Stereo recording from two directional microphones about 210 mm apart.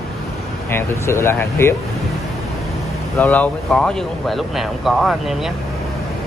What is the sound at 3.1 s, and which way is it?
Speech, 10° left (ahead or behind).